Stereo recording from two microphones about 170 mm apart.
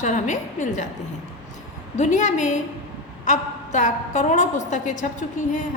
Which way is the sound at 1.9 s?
45° left (ahead or behind).